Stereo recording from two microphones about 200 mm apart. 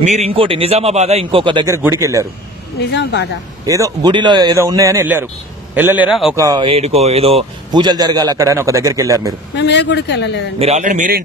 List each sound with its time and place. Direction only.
0.0 s speech: 35° right (ahead or behind); by 2.2 s 15° right (ahead or behind)
2.9 s speech: 60° left (ahead or behind)
3.6 s a man's voice: 15° right (ahead or behind)
6.3 s speech: 20° right (ahead or behind)
9.6 s speech: 60° left (ahead or behind)
10.6 s speech: 35° right (ahead or behind)